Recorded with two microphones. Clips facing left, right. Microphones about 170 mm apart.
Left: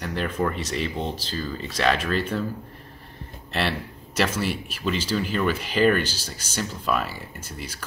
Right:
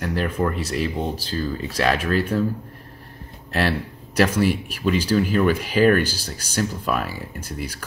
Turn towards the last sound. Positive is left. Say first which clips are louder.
# right 6 dB
turn(degrees=-10)  # may be behind; listen again after turning